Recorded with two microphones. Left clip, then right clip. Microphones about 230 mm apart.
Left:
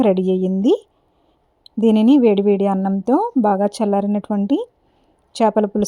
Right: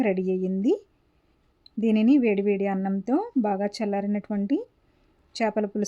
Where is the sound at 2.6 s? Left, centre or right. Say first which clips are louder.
Left 8 dB; left.